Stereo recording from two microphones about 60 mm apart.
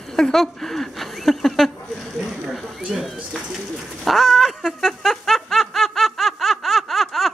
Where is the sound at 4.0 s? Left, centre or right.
Centre.